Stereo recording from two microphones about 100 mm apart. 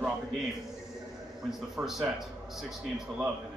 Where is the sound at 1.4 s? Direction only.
5° right (ahead or behind).